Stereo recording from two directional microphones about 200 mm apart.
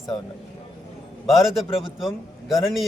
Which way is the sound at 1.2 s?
Centre (ahead or behind).